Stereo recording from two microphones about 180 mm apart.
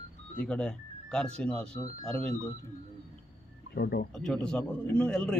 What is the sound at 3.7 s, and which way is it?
Speech, 60° left (ahead or behind).